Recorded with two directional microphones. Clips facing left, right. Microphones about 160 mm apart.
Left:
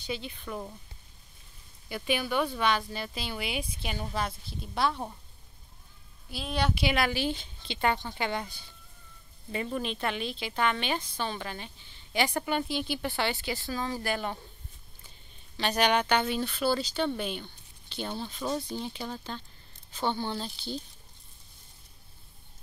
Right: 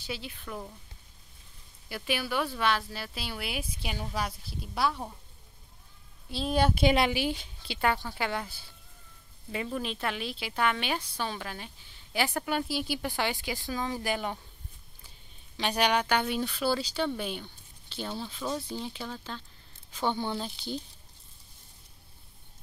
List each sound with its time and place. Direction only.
0.0 s speech: 5° right (ahead or behind)
1.9 s speech: 5° right (ahead or behind)
6.3 s a woman's voice: 40° right (ahead or behind)
7.1 s a woman's voice: 10° right (ahead or behind)
18.1 s speech: 15° left (ahead or behind)
18.7 s a woman's voice: 5° right (ahead or behind)